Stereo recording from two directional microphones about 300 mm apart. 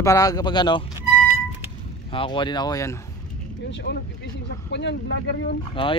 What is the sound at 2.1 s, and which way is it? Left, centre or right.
Speech, centre.